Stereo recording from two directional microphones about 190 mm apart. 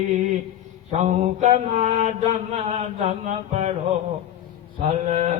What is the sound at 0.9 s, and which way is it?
Mantra, 35° right (ahead or behind).